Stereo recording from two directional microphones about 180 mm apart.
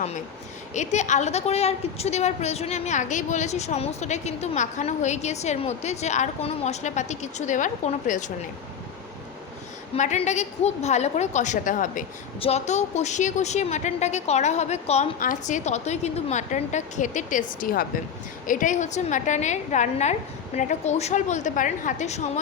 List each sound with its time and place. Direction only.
0.7 s a woman's voice: 40° left (ahead or behind)
9.9 s a woman's voice: 35° left (ahead or behind)
12.4 s a woman's voice: 35° left (ahead or behind)